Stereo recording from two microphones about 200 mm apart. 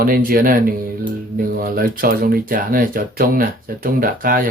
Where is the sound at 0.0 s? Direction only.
45° right (ahead or behind).